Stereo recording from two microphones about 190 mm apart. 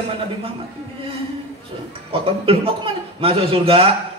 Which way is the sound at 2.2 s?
30° right (ahead or behind).